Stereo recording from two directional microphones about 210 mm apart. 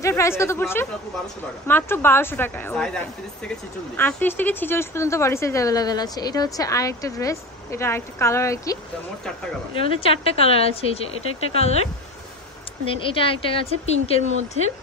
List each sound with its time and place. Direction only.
0.0 s speech: 15° left (ahead or behind)
9.8 s speech: 25° left (ahead or behind)
12.9 s speech: 25° left (ahead or behind)